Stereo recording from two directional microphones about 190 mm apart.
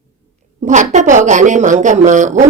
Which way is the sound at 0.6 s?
40° right (ahead or behind).